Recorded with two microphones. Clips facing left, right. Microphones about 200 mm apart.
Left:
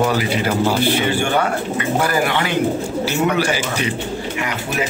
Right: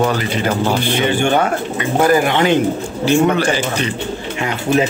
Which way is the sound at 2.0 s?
20° right (ahead or behind).